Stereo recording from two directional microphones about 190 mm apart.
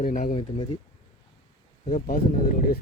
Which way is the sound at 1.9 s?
45° left (ahead or behind).